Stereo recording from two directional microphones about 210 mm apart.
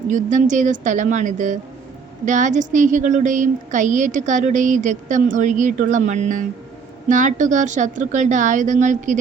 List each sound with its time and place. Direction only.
0.1 s a woman's voice: 35° right (ahead or behind)